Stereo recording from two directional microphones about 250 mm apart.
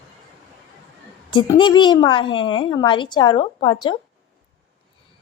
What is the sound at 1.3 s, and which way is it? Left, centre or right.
A woman's voice, centre.